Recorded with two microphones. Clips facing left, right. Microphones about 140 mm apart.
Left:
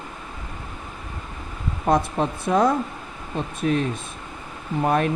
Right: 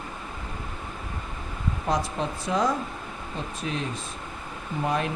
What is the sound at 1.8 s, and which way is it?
Speech, 55° left (ahead or behind).